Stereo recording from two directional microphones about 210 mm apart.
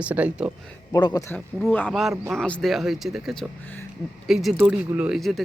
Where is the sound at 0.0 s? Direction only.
5° right (ahead or behind).